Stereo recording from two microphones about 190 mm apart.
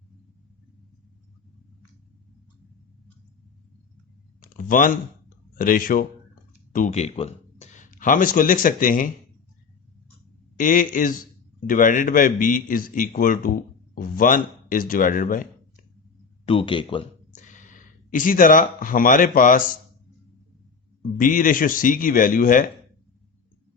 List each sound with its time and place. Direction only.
4.4 s a sound: 45° left (ahead or behind)
5.5 s speech: 50° left (ahead or behind)
10.6 s speech: 45° left (ahead or behind)
16.5 s speech: 30° left (ahead or behind)
17.3 s speech: 40° left (ahead or behind)
21.2 s speech: 45° left (ahead or behind)